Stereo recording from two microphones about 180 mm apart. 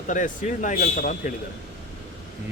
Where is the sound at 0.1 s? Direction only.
45° left (ahead or behind).